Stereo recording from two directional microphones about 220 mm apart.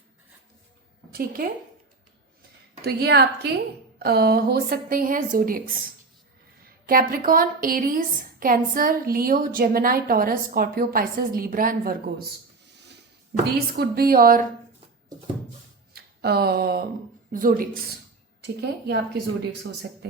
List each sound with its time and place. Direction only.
1.1 s a woman's voice: 40° right (ahead or behind)
2.8 s a woman's voice: 45° right (ahead or behind)
13.3 s a woman's voice: 45° right (ahead or behind)
16.2 s a woman's voice: 45° right (ahead or behind)
18.4 s speech: 50° right (ahead or behind)